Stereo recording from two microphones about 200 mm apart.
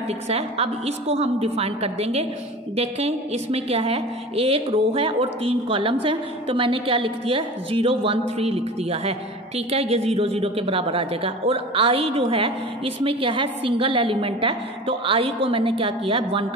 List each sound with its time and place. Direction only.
0.3 s a woman's voice: 30° right (ahead or behind)